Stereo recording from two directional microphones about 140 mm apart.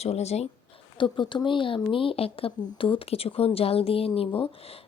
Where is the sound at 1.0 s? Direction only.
35° left (ahead or behind).